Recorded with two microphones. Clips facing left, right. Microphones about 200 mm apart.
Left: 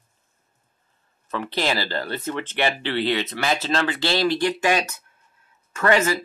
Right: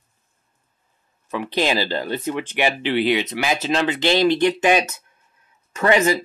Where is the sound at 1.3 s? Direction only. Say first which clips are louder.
Right 3 dB; 15° right (ahead or behind).